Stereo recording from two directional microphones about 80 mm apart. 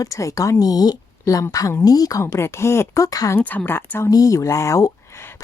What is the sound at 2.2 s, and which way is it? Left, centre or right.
A woman's voice, left.